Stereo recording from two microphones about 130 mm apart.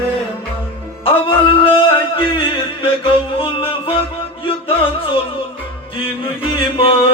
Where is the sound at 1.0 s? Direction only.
40° left (ahead or behind).